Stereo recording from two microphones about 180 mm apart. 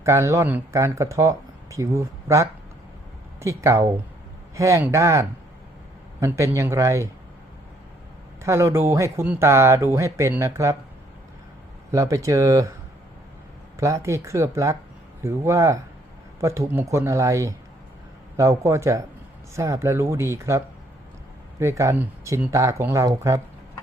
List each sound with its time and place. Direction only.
0.0 s speech: 15° right (ahead or behind)
8.4 s speech: 15° right (ahead or behind)
11.9 s speech: 15° right (ahead or behind)
13.7 s speech: 15° right (ahead or behind)
21.6 s speech: 15° right (ahead or behind)